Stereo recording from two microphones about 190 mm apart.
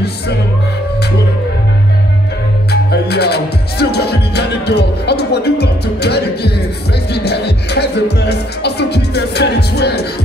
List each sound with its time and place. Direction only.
2.7 s music: 60° left (ahead or behind)